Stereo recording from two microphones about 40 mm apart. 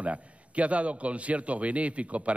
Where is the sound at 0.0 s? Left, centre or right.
Right.